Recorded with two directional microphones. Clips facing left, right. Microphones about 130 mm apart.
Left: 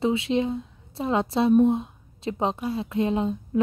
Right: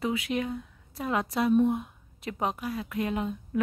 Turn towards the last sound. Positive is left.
turn(degrees=25)  # may be behind; listen again after turning